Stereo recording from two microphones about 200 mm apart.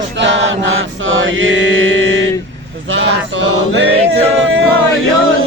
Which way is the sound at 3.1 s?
60° right (ahead or behind).